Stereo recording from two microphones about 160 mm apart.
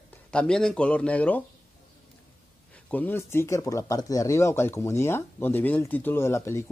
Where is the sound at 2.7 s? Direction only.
10° left (ahead or behind).